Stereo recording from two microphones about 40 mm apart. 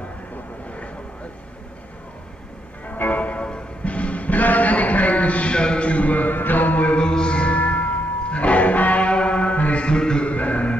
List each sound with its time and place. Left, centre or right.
2.9 s music: left
7.0 s music: left
10.3 s music: left